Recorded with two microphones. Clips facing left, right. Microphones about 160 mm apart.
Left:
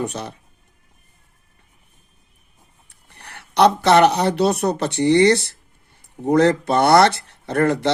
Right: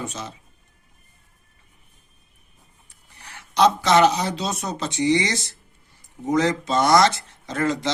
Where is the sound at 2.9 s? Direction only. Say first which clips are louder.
Left 3 dB; 65° left (ahead or behind).